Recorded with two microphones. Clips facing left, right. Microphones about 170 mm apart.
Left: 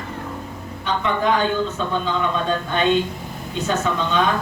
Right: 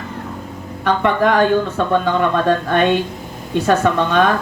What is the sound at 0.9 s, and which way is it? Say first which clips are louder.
A man's voice: right 5 dB; 70° right (ahead or behind).